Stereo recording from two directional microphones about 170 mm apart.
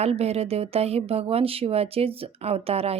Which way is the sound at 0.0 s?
40° right (ahead or behind).